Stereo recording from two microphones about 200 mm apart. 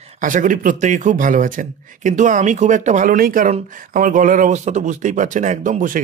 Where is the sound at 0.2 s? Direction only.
40° right (ahead or behind).